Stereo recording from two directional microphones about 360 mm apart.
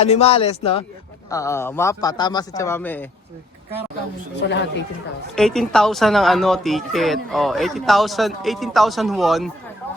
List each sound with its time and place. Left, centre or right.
0.0 s a man's voice: centre
4.4 s speech: left
5.3 s speech: centre